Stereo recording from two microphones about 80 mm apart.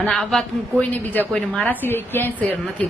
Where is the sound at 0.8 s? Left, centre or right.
Left.